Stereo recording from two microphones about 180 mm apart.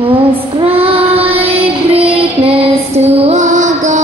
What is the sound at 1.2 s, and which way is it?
Music, 30° right (ahead or behind).